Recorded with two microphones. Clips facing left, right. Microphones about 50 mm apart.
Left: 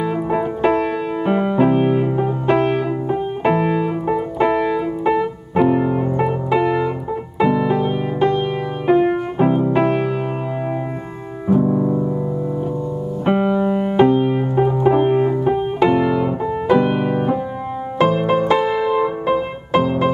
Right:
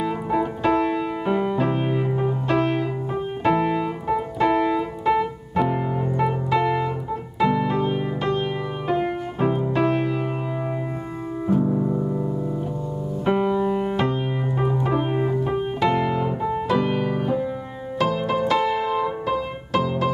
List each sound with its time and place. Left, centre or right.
0.0 s music: centre
2.4 s music: left
3.4 s piano: centre
5.6 s music: centre
6.2 s piano: centre
7.7 s music: centre
8.8 s music: left
11.6 s music: left
13.2 s music: centre
14.0 s keyboard: centre
14.4 s piano: centre
14.8 s music: left
18.5 s piano: left
18.9 s music: left